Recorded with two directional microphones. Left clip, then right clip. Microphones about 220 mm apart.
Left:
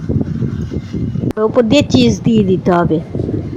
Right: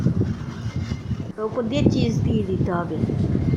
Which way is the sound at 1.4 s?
35° left (ahead or behind).